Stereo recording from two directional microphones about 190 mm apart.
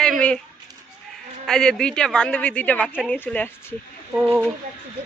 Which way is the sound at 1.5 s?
5° left (ahead or behind).